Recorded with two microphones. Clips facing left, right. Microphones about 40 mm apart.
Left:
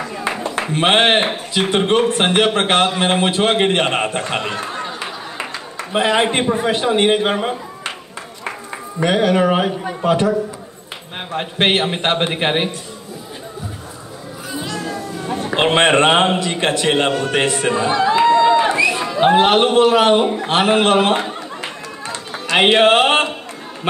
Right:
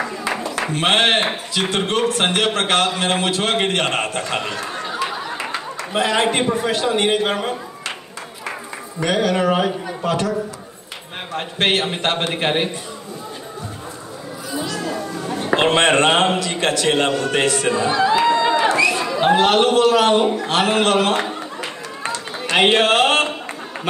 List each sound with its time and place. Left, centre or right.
0.7 s a man's voice: left
9.0 s a man's voice: left
15.5 s a man's voice: left
18.3 s crowd: centre
18.6 s a man's voice: centre
22.6 s a man's voice: left